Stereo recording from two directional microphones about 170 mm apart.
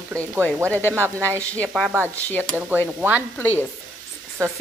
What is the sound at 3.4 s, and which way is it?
Speech, 10° left (ahead or behind).